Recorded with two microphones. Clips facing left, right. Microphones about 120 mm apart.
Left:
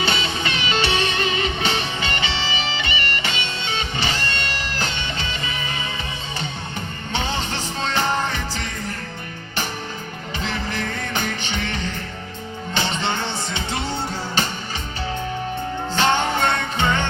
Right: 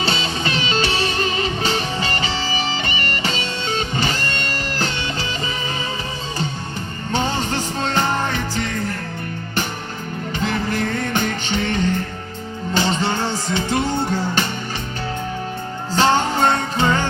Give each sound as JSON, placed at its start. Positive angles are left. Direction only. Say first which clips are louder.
{"t": 0.0, "sound": "music", "louder": "right 1 dB", "side_deg": -35}
{"t": 7.1, "sound": "music", "louder": "right 5 dB", "side_deg": -45}
{"t": 10.4, "sound": "music", "louder": "right 5 dB", "side_deg": -45}
{"t": 16.0, "sound": "music", "louder": "right 3 dB", "side_deg": -40}